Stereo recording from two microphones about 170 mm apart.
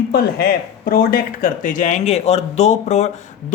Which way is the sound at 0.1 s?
70° left (ahead or behind).